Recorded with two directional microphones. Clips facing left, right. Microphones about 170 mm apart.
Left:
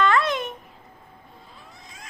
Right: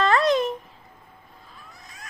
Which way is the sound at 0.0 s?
35° right (ahead or behind).